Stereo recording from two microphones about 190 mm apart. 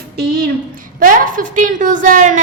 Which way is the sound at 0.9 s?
45° right (ahead or behind).